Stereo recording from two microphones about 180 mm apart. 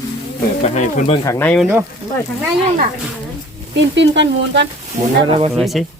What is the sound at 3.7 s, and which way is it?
Speech, 85° right.